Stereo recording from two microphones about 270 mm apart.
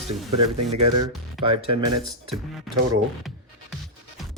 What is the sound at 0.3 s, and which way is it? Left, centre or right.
Speech, right.